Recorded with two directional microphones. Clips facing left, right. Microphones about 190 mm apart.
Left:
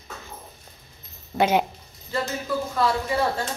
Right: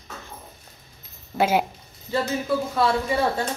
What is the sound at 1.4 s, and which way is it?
Speech, 5° right (ahead or behind).